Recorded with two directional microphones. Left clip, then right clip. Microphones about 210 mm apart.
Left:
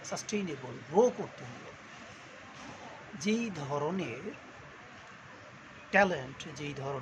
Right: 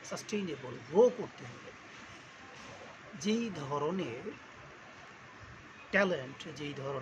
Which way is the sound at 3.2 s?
10° left (ahead or behind).